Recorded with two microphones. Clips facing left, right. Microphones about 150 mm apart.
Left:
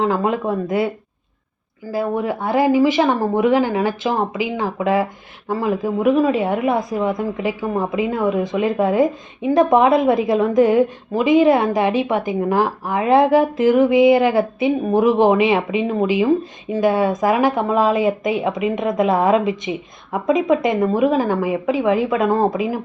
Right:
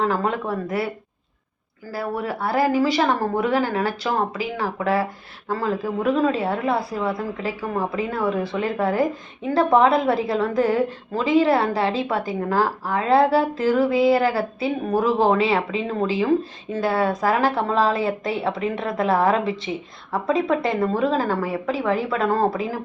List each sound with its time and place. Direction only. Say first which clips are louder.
0.0 s speech: left 4 dB; 20° left (ahead or behind)
1.9 s a woman's voice: left 6 dB; 20° left (ahead or behind)